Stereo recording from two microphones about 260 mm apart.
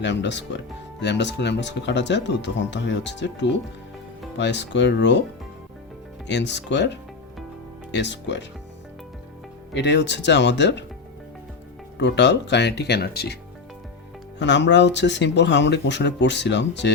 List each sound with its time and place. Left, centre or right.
0.0 s speech: left
6.2 s speech: left
9.7 s speech: left
11.9 s speech: left
14.3 s speech: left